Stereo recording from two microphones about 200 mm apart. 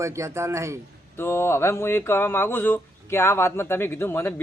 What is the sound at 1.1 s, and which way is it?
Speech, 10° left (ahead or behind).